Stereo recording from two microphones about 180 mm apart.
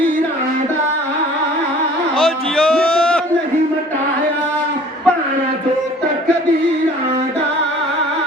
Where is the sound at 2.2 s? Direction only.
Centre (ahead or behind).